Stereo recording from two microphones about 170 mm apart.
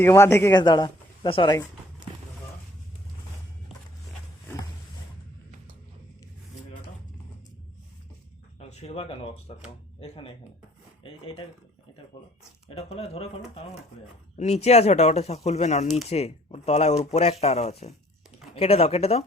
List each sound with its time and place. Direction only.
0.0 s speech: 15° left (ahead or behind)
8.5 s a sound: 40° left (ahead or behind)
9.6 s speech: 35° left (ahead or behind)
12.6 s speech: 35° left (ahead or behind)
14.3 s speech: 40° left (ahead or behind)